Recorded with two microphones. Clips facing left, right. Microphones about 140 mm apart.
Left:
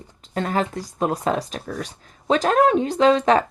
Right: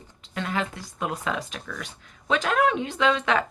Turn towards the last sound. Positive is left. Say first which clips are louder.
# left 7 dB
turn(degrees=40)  # may be behind; listen again after turning